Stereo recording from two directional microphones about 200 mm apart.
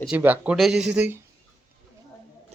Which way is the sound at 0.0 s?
5° right (ahead or behind).